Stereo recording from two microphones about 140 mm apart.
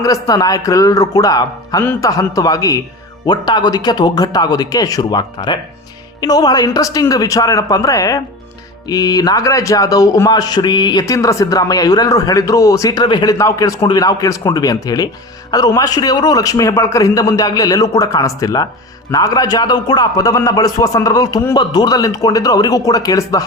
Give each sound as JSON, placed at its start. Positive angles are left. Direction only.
{"t": 0.0, "sound": "a man's voice", "side_deg": 25}
{"t": 1.8, "sound": "speech", "side_deg": 15}
{"t": 2.0, "sound": "a man's voice", "side_deg": 25}